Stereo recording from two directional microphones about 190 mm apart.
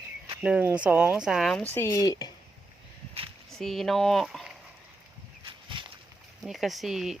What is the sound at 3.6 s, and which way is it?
Speech, centre (ahead or behind).